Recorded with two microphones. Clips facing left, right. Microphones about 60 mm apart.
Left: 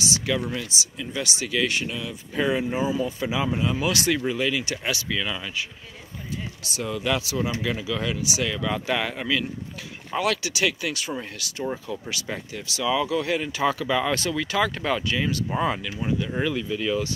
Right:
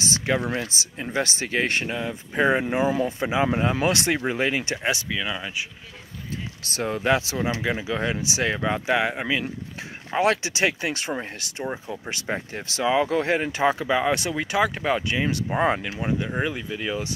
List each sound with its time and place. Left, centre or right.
0.0 s a sound: right
0.6 s speech: right
2.6 s speech: right
3.2 s speech: right
3.4 s speech: right
5.1 s speech: centre
6.7 s speech: right